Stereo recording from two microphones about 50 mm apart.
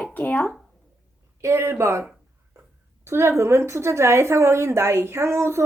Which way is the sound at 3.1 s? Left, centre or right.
Right.